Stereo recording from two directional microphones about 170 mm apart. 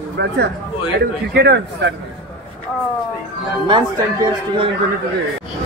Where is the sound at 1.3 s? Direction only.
80° right.